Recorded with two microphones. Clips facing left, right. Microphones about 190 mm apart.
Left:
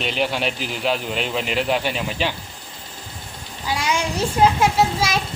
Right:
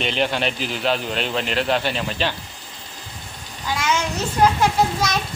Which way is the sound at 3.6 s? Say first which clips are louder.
Even; 15° left (ahead or behind).